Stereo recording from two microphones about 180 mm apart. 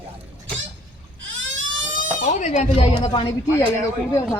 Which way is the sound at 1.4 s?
90° right.